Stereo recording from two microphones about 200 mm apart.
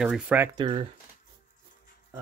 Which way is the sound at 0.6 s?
25° right (ahead or behind).